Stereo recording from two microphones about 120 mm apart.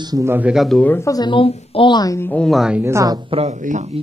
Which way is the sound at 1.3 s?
45° left (ahead or behind).